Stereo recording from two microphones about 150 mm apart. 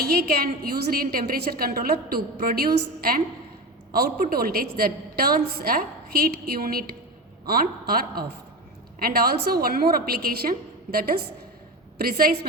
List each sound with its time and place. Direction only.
0.0 s a woman's voice: 90° right